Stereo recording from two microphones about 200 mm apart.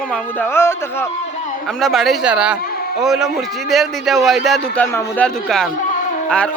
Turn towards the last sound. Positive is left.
turn(degrees=0)  # may be behind; listen again after turning